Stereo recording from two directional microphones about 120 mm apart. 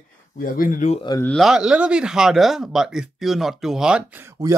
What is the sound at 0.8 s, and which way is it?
Speech, 90° left.